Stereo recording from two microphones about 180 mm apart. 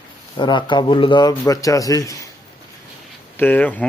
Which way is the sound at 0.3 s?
25° left (ahead or behind).